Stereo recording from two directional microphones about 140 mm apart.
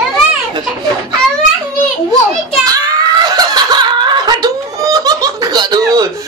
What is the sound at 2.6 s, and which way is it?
Snicker, 25° right (ahead or behind).